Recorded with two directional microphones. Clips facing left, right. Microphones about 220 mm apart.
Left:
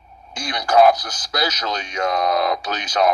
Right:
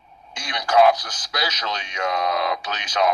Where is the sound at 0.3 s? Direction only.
35° left (ahead or behind).